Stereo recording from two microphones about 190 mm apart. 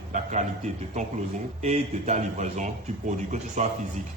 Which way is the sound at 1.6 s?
40° right (ahead or behind).